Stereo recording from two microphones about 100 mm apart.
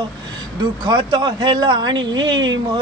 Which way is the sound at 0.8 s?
45° right (ahead or behind).